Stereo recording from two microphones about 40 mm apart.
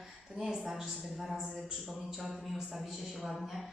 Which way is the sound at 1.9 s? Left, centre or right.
Centre.